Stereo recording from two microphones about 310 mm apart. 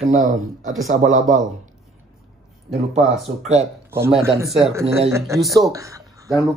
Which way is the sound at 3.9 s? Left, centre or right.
Centre.